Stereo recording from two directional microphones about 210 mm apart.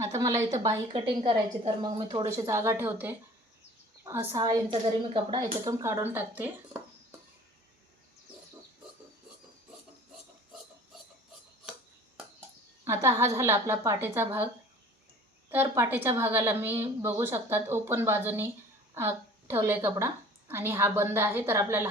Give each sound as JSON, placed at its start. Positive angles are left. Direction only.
{"t": 0.0, "sound": "a woman's voice", "side_deg": -15}
{"t": 12.8, "sound": "a woman's voice", "side_deg": -15}